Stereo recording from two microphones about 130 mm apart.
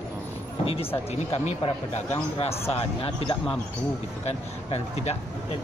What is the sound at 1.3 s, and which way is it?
Speech, 55° left (ahead or behind).